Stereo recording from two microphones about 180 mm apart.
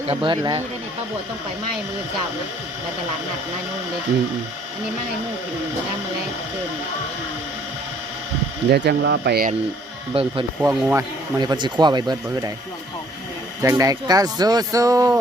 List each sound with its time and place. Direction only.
0.1 s speech: 25° right (ahead or behind)
8.7 s speech: 70° right (ahead or behind)
10.1 s speech: 30° right (ahead or behind)
10.6 s speech: 15° right (ahead or behind)
13.6 s speech: 20° right (ahead or behind)